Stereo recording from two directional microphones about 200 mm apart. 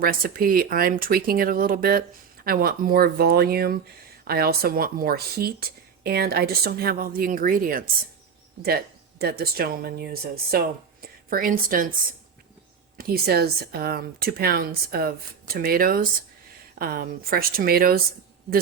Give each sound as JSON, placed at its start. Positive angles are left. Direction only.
{"t": 0.0, "sound": "speech", "side_deg": -45}
{"t": 13.0, "sound": "speech", "side_deg": -50}